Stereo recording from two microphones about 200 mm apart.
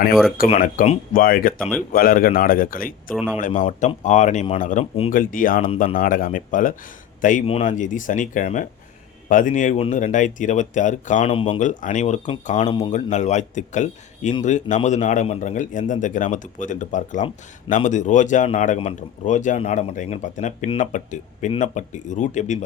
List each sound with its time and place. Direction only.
0.1 s speech: centre (ahead or behind)
0.6 s speech: 45° left (ahead or behind)
3.2 s speech: 5° right (ahead or behind)
3.4 s a man's voice: 40° left (ahead or behind)
11.3 s speech: 25° left (ahead or behind)
11.8 s speech: 40° left (ahead or behind)
12.6 s speech: 20° left (ahead or behind)
12.9 s speech: 35° left (ahead or behind)